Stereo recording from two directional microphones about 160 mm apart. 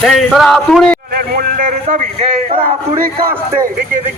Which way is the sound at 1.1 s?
65° right (ahead or behind).